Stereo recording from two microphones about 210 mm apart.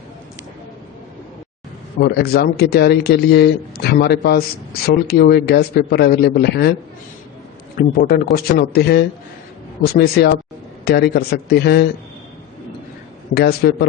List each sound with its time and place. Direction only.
2.0 s speech: 50° left (ahead or behind)
7.8 s speech: 40° left (ahead or behind)
13.3 s speech: 50° left (ahead or behind)